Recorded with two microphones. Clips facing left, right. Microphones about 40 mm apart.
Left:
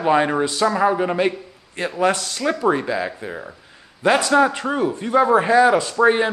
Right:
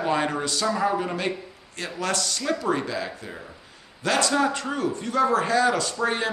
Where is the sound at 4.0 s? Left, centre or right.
Left.